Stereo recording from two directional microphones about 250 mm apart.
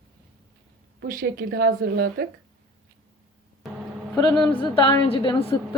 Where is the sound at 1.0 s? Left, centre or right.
Right.